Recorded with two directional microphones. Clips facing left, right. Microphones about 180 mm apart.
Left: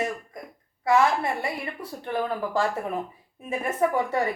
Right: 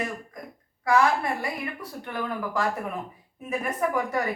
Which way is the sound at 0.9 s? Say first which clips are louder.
Left 1 dB; 25° left (ahead or behind).